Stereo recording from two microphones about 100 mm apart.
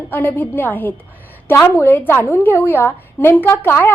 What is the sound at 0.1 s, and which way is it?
A woman's voice, 20° left (ahead or behind).